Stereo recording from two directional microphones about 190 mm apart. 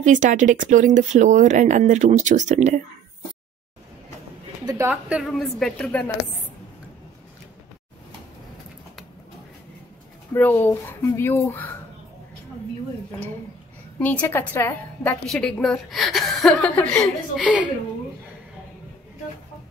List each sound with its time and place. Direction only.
0.0 s speech: 40° right (ahead or behind)
4.6 s a woman's voice: 15° right (ahead or behind)
5.1 s a woman's voice: centre (ahead or behind)
10.3 s speech: 10° left (ahead or behind)
13.9 s a woman's voice: 10° left (ahead or behind)
17.4 s a woman's voice: 5° right (ahead or behind)